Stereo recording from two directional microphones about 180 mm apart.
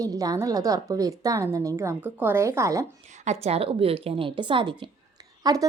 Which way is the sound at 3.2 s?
40° right (ahead or behind).